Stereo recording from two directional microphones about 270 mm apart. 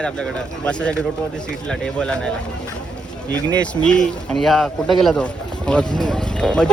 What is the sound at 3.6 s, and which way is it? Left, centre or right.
Speech, centre.